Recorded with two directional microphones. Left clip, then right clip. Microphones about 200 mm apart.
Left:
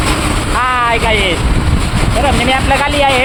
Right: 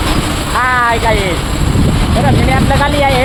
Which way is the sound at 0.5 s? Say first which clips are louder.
Right 1 dB; centre (ahead or behind).